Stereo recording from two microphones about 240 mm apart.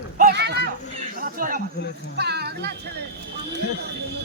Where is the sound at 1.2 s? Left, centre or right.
Right.